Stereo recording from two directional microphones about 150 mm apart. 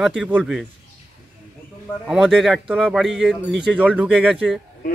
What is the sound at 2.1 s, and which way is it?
Speech, centre (ahead or behind).